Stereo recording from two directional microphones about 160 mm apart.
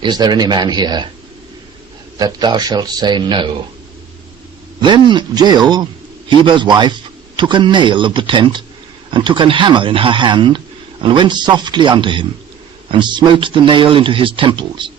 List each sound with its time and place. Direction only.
0.0 s speech: 25° right (ahead or behind)
2.1 s speech: 25° right (ahead or behind)
4.8 s speech: 30° right (ahead or behind)